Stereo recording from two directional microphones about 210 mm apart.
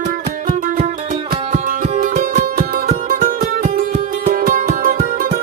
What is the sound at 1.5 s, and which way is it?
Music, 35° right (ahead or behind).